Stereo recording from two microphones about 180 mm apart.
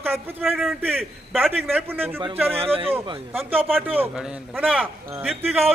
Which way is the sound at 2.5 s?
30° right (ahead or behind).